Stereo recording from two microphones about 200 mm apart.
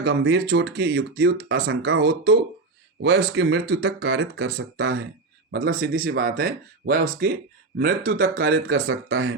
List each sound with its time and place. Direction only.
0.0 s speech: 60° right (ahead or behind); by 1.8 s 80° right
1.9 s speech: 55° right (ahead or behind); by 5.0 s 70° right (ahead or behind)
5.5 s speech: 55° right (ahead or behind)